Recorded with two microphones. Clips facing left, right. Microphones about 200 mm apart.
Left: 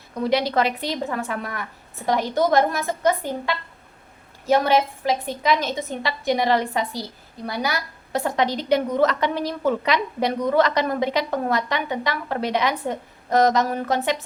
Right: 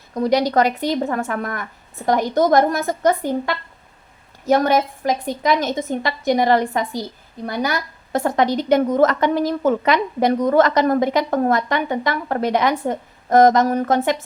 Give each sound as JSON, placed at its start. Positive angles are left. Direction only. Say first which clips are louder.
{"t": 0.1, "sound": "a woman's voice", "louder": "right 4 dB", "side_deg": -45}
{"t": 4.4, "sound": "a woman's voice", "louder": "right 2 dB", "side_deg": -45}